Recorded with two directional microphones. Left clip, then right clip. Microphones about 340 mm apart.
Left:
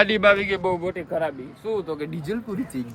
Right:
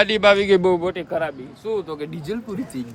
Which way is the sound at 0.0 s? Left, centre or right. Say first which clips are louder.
Right 2 dB; centre.